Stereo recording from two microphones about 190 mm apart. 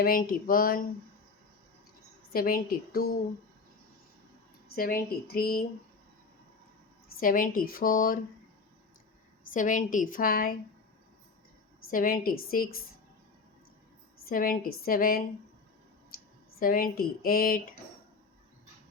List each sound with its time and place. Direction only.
0.0 s a woman's voice: 50° left (ahead or behind)
2.3 s a woman's voice: 50° left (ahead or behind)
4.7 s a woman's voice: 50° left (ahead or behind)
7.2 s a woman's voice: 50° left (ahead or behind)
9.5 s a woman's voice: 45° left (ahead or behind)
11.9 s a woman's voice: 45° left (ahead or behind)
14.3 s a woman's voice: 45° left (ahead or behind)
16.6 s a woman's voice: 50° left (ahead or behind)